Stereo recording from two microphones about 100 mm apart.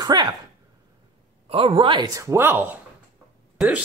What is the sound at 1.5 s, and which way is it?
Speech, 65° right (ahead or behind).